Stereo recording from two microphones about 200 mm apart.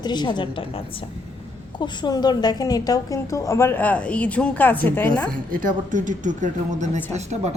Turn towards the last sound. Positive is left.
turn(degrees=-35)  # may be behind; listen again after turning